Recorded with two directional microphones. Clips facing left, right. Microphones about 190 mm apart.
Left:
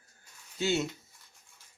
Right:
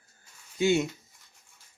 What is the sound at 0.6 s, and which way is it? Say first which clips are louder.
Speech: right 5 dB; 15° right (ahead or behind).